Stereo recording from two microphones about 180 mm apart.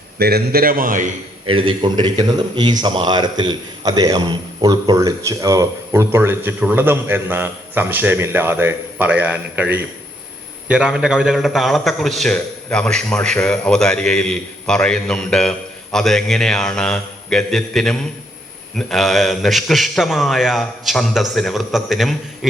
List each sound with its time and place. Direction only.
0.2 s a man's voice: 60° right (ahead or behind)
1.5 s a man's voice: 30° right (ahead or behind); by 22.1 s centre (ahead or behind)